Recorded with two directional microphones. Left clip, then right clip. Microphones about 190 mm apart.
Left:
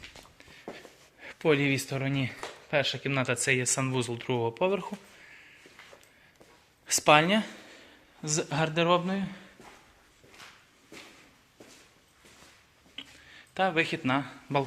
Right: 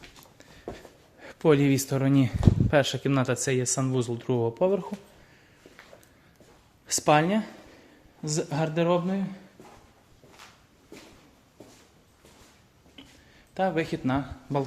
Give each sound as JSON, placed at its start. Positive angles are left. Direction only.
{"t": 1.2, "sound": "speech", "side_deg": -30}
{"t": 6.8, "sound": "speech", "side_deg": -15}
{"t": 13.0, "sound": "a sound", "side_deg": -10}